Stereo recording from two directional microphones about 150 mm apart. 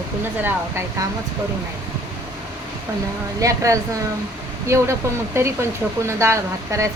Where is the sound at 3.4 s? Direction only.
20° right (ahead or behind).